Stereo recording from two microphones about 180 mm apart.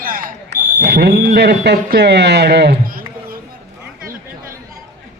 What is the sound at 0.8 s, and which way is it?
Speech, 65° right (ahead or behind).